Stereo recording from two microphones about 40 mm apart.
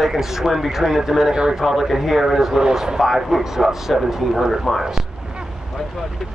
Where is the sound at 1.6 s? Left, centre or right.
Centre.